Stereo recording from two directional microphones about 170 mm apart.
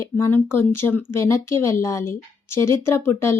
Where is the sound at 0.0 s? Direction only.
15° left (ahead or behind).